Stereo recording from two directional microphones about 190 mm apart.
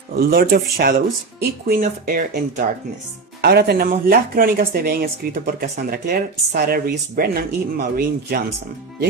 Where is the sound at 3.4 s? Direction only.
55° right (ahead or behind).